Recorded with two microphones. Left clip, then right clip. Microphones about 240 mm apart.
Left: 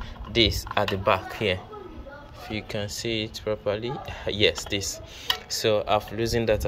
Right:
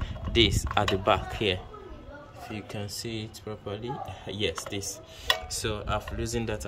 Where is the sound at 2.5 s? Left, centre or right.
Centre.